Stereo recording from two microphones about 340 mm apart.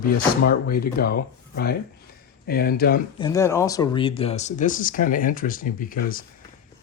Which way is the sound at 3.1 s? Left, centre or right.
Centre.